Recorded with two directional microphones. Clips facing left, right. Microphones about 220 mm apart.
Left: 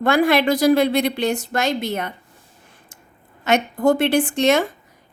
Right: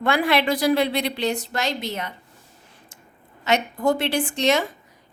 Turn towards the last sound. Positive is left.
turn(degrees=50)  # may be behind; listen again after turning